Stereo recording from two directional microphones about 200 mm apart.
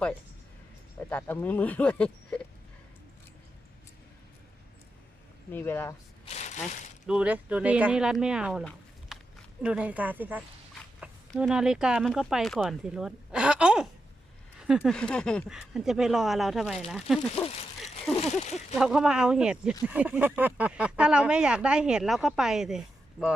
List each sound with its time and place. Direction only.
0.9 s speech: 10° left (ahead or behind)
5.5 s speech: 10° left (ahead or behind)
6.2 s speech: 35° left (ahead or behind)
7.1 s speech: 5° right (ahead or behind)
9.1 s a sound: centre (ahead or behind)
9.6 s speech: 5° right (ahead or behind)
17.3 s a sound: 30° left (ahead or behind)
18.5 s speech: centre (ahead or behind)